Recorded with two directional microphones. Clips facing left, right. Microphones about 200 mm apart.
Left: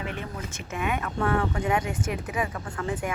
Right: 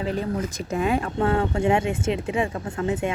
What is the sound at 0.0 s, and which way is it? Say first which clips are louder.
Speech: right 9 dB; 35° right (ahead or behind).